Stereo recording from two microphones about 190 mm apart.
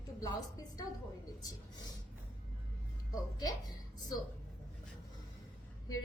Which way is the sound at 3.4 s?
20° left (ahead or behind).